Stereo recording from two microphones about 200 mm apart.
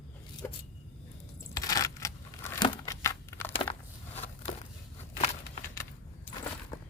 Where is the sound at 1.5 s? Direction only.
15° left (ahead or behind).